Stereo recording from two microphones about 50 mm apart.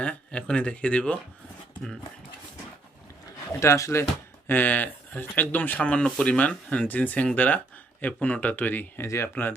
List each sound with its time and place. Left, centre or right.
0.0 s speech: left
3.6 s speech: left
4.4 s speech: left
9.0 s speech: left
9.3 s speech: left